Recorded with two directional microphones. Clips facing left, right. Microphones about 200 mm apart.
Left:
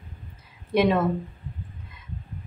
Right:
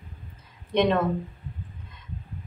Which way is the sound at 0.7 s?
5° left (ahead or behind).